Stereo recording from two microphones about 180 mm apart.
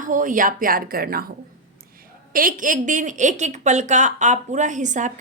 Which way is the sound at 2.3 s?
50° right (ahead or behind).